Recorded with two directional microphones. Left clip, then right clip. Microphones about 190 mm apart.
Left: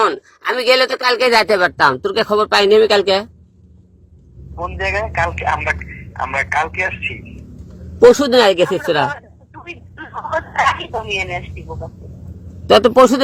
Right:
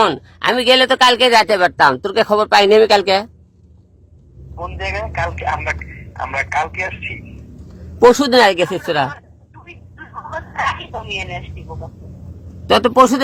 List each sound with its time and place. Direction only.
0.4 s speech: centre (ahead or behind)
1.8 s speech: 15° right (ahead or behind)
4.5 s a man's voice: 15° left (ahead or behind)
7.9 s speech: 15° right (ahead or behind)
8.9 s a man's voice: 10° left (ahead or behind)
9.6 s a man's voice: 40° left (ahead or behind); by 13.2 s 10° left (ahead or behind)